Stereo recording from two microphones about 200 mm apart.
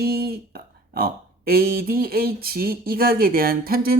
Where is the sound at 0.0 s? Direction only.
50° right (ahead or behind).